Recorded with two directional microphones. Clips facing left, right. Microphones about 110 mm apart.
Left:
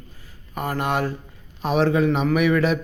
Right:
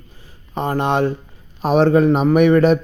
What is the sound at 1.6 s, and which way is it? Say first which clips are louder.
A man's voice: right 6 dB; 40° right (ahead or behind).